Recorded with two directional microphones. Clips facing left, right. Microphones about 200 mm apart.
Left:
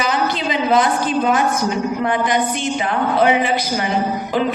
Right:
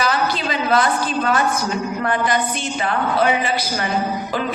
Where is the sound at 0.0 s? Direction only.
15° left (ahead or behind).